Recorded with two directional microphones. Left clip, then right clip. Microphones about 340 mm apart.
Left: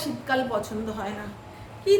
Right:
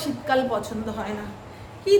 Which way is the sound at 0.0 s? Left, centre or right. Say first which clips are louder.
Right 3 dB; centre.